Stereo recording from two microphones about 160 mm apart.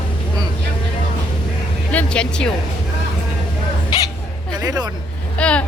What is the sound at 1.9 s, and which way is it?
Speech, 5° left (ahead or behind).